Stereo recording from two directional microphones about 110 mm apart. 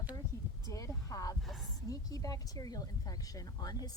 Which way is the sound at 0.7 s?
30° left (ahead or behind).